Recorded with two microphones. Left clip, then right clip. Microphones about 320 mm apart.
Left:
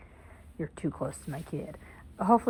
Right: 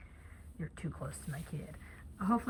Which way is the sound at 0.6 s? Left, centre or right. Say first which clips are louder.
Left 11 dB; centre.